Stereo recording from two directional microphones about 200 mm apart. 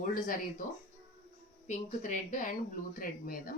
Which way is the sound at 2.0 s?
40° left (ahead or behind).